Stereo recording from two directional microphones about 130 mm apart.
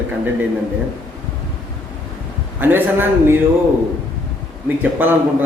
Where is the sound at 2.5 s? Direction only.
15° right (ahead or behind).